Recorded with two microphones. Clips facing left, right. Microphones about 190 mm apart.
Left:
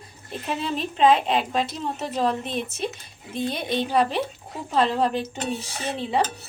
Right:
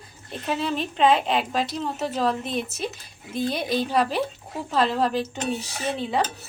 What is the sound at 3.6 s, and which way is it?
Speech, 5° right (ahead or behind).